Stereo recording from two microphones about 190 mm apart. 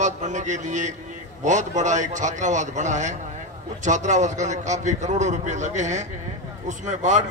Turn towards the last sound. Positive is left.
turn(degrees=-40)  # may be behind; listen again after turning